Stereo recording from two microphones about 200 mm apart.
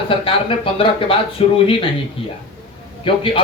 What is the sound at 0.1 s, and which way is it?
Speech, 25° left (ahead or behind).